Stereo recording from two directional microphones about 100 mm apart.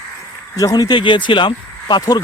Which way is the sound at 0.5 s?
40° left (ahead or behind).